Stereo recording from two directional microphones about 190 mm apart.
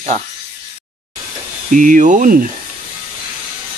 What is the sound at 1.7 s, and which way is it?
Speech, 45° right (ahead or behind).